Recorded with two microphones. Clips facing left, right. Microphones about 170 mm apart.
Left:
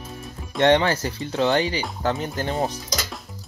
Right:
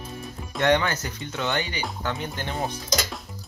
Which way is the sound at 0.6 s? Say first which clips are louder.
Left 4 dB; 30° left (ahead or behind).